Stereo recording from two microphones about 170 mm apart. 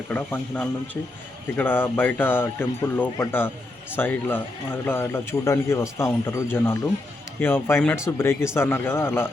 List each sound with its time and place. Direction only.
0.1 s speech: 10° left (ahead or behind)